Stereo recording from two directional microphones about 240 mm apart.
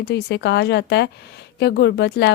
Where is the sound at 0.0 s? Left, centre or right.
Left.